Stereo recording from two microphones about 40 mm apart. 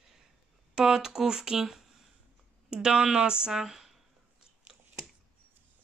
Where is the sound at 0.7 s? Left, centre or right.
Centre.